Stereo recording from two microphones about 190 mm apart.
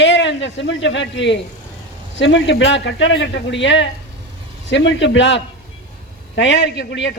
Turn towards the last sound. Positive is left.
turn(degrees=65)  # may be behind; listen again after turning